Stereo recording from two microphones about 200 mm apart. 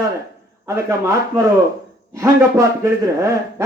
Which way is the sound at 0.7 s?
15° right (ahead or behind).